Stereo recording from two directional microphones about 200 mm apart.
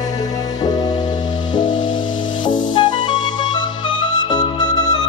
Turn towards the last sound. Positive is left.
turn(degrees=20)  # may be behind; listen again after turning